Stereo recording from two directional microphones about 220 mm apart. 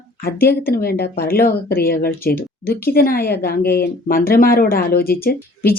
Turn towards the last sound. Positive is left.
turn(degrees=45)  # may be behind; listen again after turning